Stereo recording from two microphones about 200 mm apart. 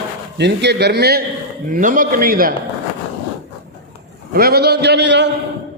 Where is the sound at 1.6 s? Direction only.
45° right (ahead or behind).